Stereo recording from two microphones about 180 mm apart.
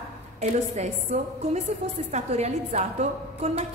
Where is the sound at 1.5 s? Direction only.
35° right (ahead or behind).